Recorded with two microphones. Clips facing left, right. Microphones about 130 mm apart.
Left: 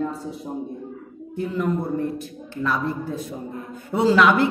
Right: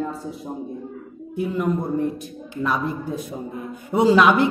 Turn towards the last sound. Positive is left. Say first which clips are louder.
# right 2 dB
turn(degrees=-20)  # may be behind; listen again after turning